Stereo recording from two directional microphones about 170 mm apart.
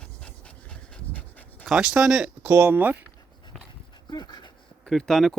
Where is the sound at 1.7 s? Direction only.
5° right (ahead or behind).